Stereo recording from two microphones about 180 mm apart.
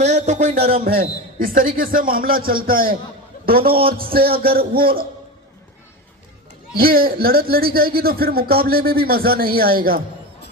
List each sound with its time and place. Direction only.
0.0 s speech: 40° right (ahead or behind)
0.9 s a man's voice: 55° right (ahead or behind)
6.7 s speech: 55° right (ahead or behind)